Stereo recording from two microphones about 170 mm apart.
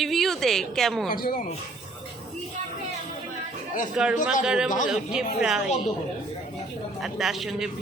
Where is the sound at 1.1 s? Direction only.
60° left (ahead or behind).